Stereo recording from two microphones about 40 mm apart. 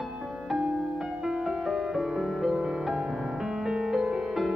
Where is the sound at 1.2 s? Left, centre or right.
Centre.